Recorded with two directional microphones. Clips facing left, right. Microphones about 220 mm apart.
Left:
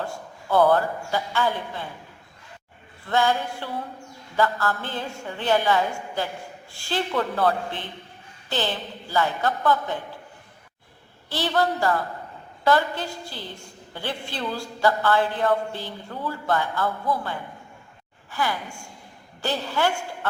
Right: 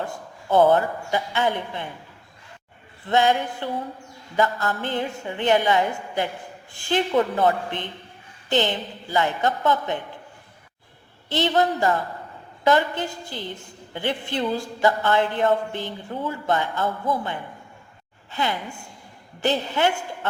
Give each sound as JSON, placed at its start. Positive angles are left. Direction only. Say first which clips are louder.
{"t": 0.0, "sound": "a woman's voice", "louder": "right 1 dB", "side_deg": -20}
{"t": 3.1, "sound": "a woman's voice", "louder": "right 2 dB", "side_deg": -20}
{"t": 11.3, "sound": "a woman's voice", "louder": "right 3 dB", "side_deg": -20}